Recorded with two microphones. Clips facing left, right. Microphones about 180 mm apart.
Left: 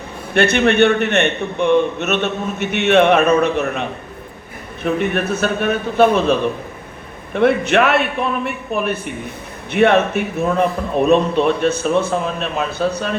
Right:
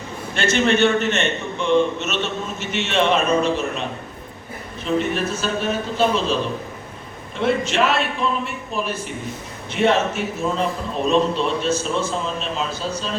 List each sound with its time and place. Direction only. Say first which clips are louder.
0.3 s a man's voice: left 5 dB; 60° left (ahead or behind)